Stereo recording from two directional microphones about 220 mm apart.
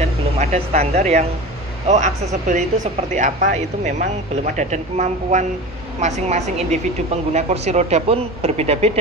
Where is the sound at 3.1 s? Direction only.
35° right (ahead or behind).